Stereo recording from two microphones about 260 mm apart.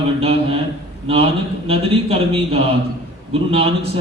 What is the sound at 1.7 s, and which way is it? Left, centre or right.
Speech, right.